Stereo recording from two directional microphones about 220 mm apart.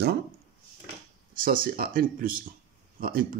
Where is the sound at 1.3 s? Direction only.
40° right (ahead or behind).